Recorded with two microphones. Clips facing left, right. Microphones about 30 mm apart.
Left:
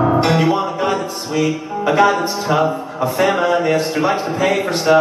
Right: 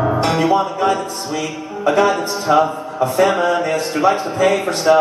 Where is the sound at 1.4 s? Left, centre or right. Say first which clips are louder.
Left 3 dB; centre.